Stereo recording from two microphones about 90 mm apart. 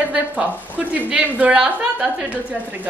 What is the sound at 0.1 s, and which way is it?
A woman's voice, 15° right (ahead or behind).